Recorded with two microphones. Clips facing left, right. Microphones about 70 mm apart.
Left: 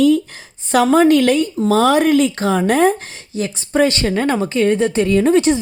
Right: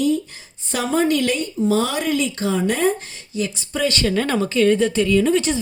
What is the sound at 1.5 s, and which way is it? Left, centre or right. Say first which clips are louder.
Speech: left 6 dB; left.